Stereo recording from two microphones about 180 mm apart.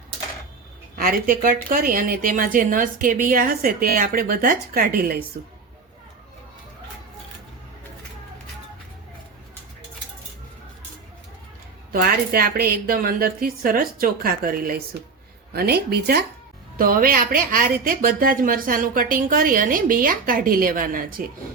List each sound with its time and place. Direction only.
0.9 s a woman's voice: 50° right (ahead or behind)
11.9 s a woman's voice: 55° right (ahead or behind)